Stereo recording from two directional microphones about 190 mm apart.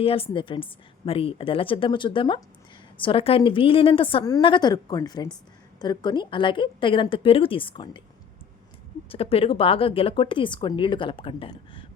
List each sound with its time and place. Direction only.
0.0 s speech: 30° left (ahead or behind)
9.0 s speech: 30° left (ahead or behind)